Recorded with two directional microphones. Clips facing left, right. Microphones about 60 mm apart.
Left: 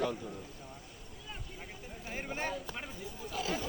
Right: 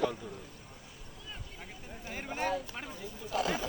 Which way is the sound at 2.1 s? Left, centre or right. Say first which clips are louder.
Right 3 dB; centre.